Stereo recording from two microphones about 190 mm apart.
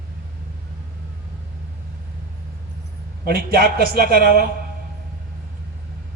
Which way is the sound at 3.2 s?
55° right (ahead or behind).